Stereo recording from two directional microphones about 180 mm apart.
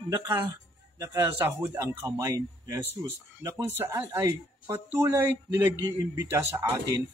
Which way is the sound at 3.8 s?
10° right (ahead or behind).